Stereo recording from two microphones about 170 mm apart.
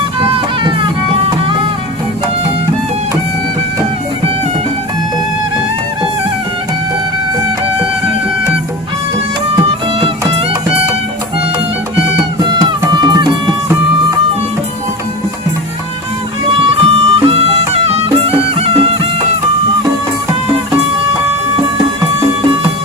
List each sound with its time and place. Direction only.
0.2 s music: 30° right (ahead or behind)
9.6 s music: 30° right (ahead or behind)
12.4 s music: 25° right (ahead or behind)
16.5 s music: 35° right (ahead or behind)